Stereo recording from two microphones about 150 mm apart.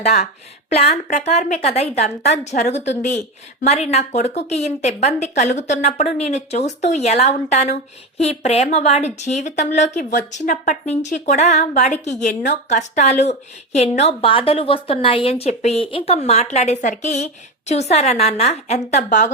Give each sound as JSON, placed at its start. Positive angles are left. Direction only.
{"t": 0.7, "sound": "a woman's voice", "side_deg": 45}